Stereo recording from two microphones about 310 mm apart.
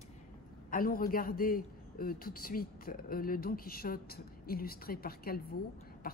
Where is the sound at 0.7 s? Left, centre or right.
Left.